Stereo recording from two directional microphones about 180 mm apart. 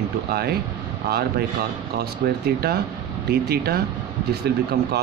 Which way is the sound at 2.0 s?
60° right (ahead or behind).